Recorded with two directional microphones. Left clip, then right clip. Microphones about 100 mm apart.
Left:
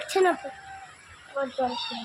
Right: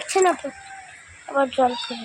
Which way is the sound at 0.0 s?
25° right (ahead or behind).